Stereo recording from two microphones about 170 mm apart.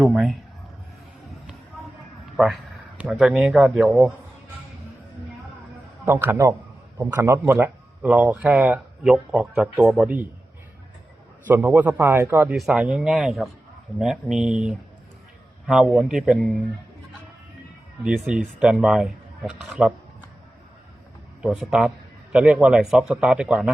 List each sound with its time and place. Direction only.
0.0 s a man's voice: centre (ahead or behind)
2.3 s a man's voice: centre (ahead or behind)
6.1 s speech: 15° right (ahead or behind)
11.4 s a man's voice: 10° right (ahead or behind)
18.0 s a man's voice: 5° right (ahead or behind)
21.4 s a man's voice: 5° right (ahead or behind)